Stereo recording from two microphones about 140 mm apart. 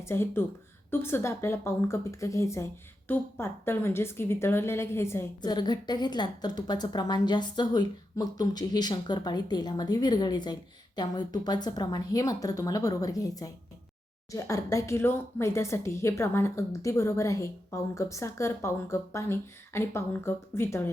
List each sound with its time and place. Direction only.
0.0 s a woman's voice: 15° left (ahead or behind)
5.4 s a woman's voice: 30° left (ahead or behind)